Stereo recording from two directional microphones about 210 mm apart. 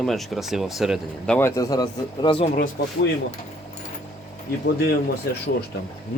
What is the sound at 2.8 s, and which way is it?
Speech, 50° left (ahead or behind).